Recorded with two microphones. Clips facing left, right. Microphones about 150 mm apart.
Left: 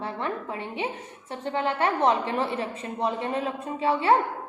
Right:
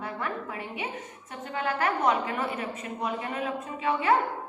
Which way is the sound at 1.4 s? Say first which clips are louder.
Left 3 dB; 25° left (ahead or behind).